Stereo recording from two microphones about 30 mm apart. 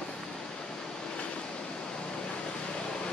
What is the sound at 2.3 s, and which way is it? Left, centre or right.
Vehicle, left.